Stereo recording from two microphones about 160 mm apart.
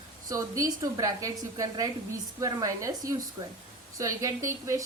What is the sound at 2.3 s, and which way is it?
A woman's voice, 20° right (ahead or behind).